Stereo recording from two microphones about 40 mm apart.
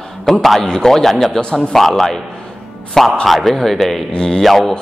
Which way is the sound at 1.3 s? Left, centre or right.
Left.